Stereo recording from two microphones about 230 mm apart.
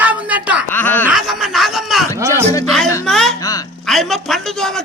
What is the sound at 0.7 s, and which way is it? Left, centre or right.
Groan, centre.